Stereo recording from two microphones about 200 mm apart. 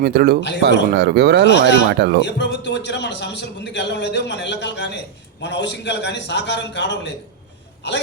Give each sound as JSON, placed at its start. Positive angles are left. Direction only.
{"t": 0.0, "sound": "speech", "side_deg": -50}
{"t": 1.5, "sound": "a man's voice", "side_deg": 60}
{"t": 1.9, "sound": "speech", "side_deg": -60}
{"t": 2.2, "sound": "a man's voice", "side_deg": 60}